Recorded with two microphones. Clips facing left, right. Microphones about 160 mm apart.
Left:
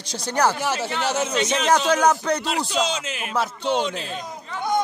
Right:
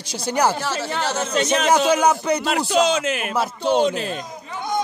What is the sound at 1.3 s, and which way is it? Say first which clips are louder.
Speech: right 3 dB; 50° right (ahead or behind).